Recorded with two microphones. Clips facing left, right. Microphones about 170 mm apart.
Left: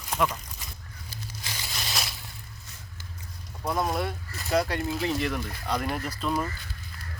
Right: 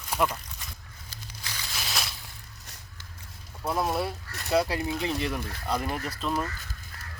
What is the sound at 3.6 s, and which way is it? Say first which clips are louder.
Speech: even; 5° right (ahead or behind).